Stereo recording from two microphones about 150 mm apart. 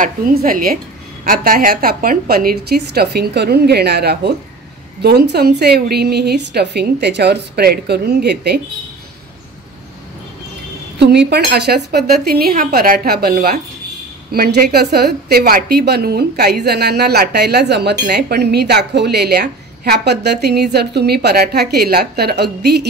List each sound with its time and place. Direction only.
0.0 s speech: 75° right (ahead or behind); by 8.5 s 90° right
11.1 s speech: 90° right